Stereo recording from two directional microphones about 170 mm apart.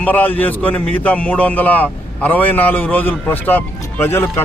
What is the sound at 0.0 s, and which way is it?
A man's voice, 10° left (ahead or behind).